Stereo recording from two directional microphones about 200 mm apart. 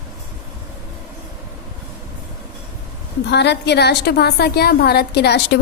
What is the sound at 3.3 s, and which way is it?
A woman's voice, 60° left (ahead or behind).